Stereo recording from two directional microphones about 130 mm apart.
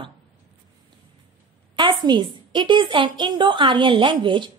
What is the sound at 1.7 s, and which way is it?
A woman's voice, 35° right (ahead or behind).